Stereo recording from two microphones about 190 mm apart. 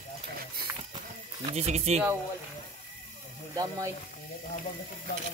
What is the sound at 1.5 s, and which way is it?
Speech, 35° right (ahead or behind).